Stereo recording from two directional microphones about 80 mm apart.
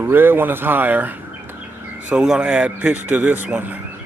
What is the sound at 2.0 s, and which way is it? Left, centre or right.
Speech, centre.